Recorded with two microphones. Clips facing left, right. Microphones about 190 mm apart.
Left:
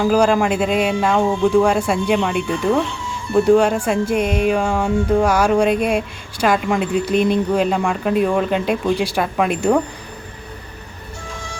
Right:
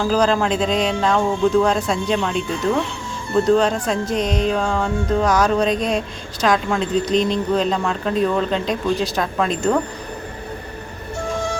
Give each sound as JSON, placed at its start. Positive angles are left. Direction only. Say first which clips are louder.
{"t": 0.0, "sound": "speech", "louder": "left 3 dB", "side_deg": 10}